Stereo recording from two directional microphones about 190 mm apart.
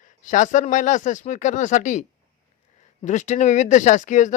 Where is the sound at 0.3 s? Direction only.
40° left (ahead or behind).